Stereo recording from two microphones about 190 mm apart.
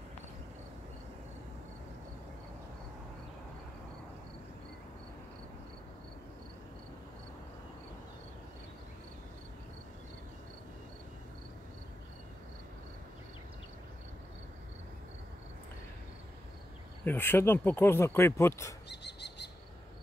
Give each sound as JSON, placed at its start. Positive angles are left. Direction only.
{"t": 17.0, "sound": "speech", "side_deg": 10}
{"t": 18.9, "sound": "bird", "side_deg": 65}